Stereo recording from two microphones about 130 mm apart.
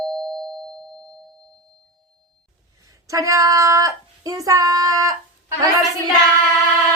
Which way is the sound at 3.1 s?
25° right (ahead or behind).